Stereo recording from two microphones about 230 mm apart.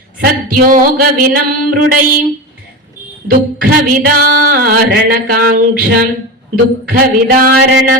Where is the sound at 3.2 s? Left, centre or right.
Right.